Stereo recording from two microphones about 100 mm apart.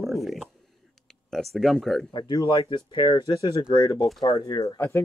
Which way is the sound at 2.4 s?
35° left (ahead or behind).